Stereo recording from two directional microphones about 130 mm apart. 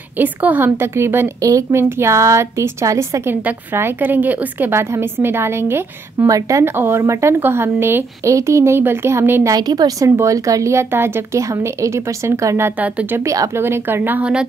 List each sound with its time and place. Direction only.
0.2 s a woman's voice: 15° right (ahead or behind)
9.5 s a woman's voice: 30° right (ahead or behind); by 14.4 s 10° right (ahead or behind)